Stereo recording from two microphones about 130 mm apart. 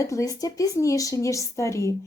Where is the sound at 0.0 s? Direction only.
25° left (ahead or behind).